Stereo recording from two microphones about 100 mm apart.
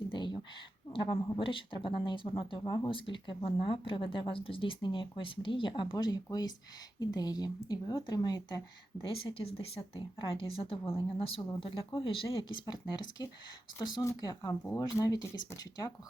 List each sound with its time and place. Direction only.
0.1 s a sound: 55° left (ahead or behind)
0.9 s speech: 55° left (ahead or behind)
9.0 s speech: 60° left (ahead or behind)
12.9 s speech: 45° left (ahead or behind)
14.0 s speech: 30° left (ahead or behind)